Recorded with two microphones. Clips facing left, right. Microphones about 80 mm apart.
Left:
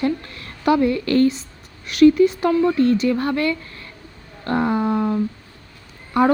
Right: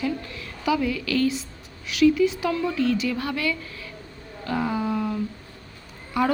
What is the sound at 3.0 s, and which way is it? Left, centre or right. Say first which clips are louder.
Speech: left 7 dB; left.